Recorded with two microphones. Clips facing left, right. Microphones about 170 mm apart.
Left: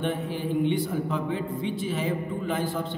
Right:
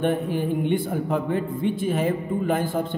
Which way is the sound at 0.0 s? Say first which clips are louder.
Right 6 dB; 50° right (ahead or behind).